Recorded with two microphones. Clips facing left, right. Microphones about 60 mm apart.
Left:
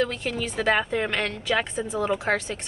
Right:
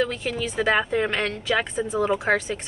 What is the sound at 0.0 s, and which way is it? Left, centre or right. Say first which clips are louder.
A woman's voice: right 1 dB; centre.